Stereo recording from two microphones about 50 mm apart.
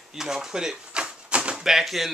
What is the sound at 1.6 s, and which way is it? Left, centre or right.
Speech, centre.